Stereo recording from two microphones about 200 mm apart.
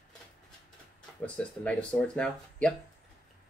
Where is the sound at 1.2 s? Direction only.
5° left (ahead or behind).